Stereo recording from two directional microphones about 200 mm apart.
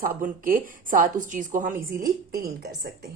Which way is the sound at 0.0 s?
45° right (ahead or behind).